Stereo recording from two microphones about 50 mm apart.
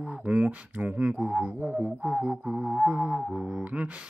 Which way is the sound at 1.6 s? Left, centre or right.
Left.